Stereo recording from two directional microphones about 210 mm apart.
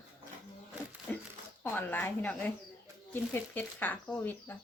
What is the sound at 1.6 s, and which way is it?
Speech, 10° left (ahead or behind).